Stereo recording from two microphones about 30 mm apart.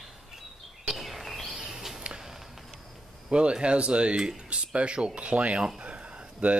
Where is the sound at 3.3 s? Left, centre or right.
Right.